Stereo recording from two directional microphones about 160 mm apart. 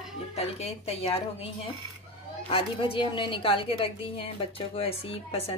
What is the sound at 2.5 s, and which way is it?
A woman's voice, 35° left (ahead or behind).